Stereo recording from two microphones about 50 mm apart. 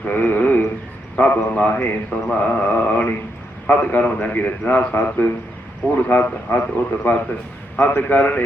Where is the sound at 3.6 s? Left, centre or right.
Left.